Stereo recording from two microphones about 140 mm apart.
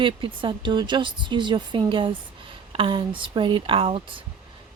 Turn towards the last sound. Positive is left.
turn(degrees=-40)  # may be behind; listen again after turning